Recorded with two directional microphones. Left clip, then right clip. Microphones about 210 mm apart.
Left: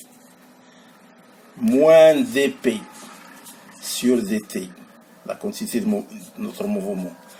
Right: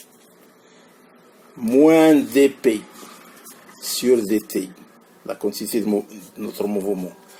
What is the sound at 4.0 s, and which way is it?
Speech, 35° right (ahead or behind).